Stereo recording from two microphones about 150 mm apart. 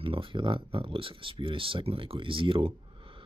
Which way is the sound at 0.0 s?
35° right (ahead or behind).